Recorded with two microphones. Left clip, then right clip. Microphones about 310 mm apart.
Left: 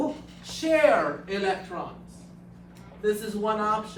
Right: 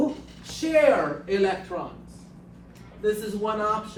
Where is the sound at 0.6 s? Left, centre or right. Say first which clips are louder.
Right 1 dB; centre.